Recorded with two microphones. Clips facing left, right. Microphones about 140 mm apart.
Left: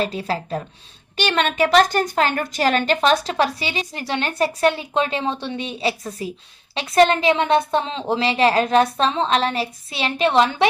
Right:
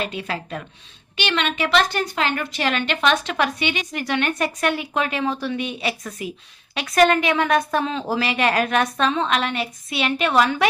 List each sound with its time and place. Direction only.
0.0 s a woman's voice: 35° left (ahead or behind)